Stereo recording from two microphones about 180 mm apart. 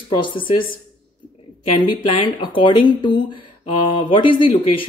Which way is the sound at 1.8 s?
30° left (ahead or behind).